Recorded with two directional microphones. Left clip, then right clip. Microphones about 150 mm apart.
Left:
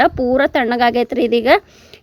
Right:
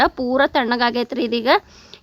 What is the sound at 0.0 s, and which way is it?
Speech, 10° left (ahead or behind).